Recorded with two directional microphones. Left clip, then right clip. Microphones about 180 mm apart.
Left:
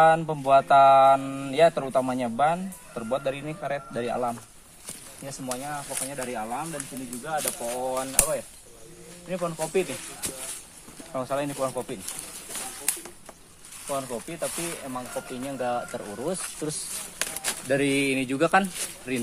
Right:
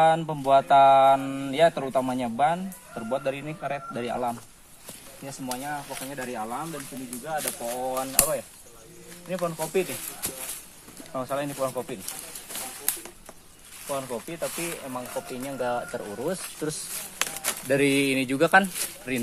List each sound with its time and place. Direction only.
0.0 s mantra: 10° left (ahead or behind)
5.6 s speech: 30° left (ahead or behind)
7.2 s mantra: 15° left (ahead or behind)
9.3 s speech: centre (ahead or behind)
11.1 s mantra: 5° left (ahead or behind)
11.6 s bird: 5° right (ahead or behind)
14.0 s speech: 10° right (ahead or behind)
15.0 s speech: 25° right (ahead or behind)
17.6 s speech: 35° right (ahead or behind)
18.7 s speech: 20° right (ahead or behind)